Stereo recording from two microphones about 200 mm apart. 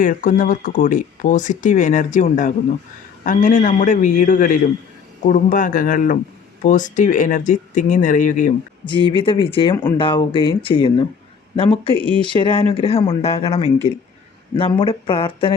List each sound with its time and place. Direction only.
0.0 s speech: 45° left (ahead or behind)
9.1 s speech: 25° left (ahead or behind)
11.9 s speech: 10° left (ahead or behind)
12.3 s speech: 25° left (ahead or behind)